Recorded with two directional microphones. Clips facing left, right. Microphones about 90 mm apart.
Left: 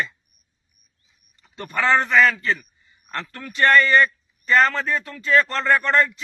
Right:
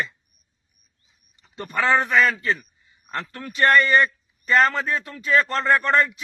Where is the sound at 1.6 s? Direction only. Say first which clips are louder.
Left 1 dB; 5° right (ahead or behind).